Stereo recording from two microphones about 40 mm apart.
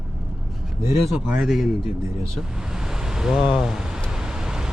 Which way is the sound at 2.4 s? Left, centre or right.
Centre.